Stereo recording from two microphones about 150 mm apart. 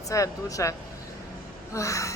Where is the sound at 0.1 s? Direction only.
20° left (ahead or behind).